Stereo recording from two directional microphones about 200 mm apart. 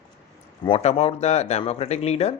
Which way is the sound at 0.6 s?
30° left (ahead or behind).